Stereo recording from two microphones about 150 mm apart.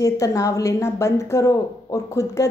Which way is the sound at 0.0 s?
20° left (ahead or behind).